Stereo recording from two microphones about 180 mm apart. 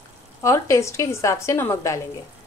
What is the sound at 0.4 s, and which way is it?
A woman's voice, 15° left (ahead or behind).